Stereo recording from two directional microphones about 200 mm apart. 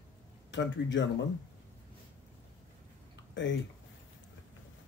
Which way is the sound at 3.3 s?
65° left (ahead or behind).